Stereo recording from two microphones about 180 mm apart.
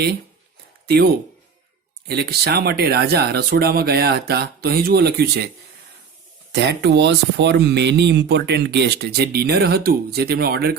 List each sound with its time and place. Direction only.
0.9 s speech: 65° right (ahead or behind)
6.5 s speech: 65° right (ahead or behind)